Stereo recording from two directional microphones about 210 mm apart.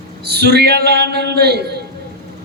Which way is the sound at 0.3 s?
50° right (ahead or behind).